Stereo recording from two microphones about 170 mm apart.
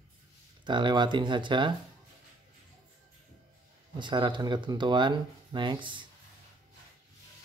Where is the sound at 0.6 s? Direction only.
25° right (ahead or behind).